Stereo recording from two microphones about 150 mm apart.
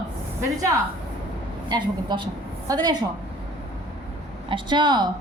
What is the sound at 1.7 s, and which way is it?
A woman's voice, 30° right (ahead or behind).